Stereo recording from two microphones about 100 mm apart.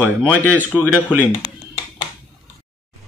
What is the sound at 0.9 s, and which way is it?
Speech, 15° right (ahead or behind).